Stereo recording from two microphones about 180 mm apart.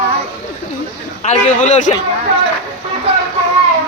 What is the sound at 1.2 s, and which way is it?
Speech, 40° left (ahead or behind).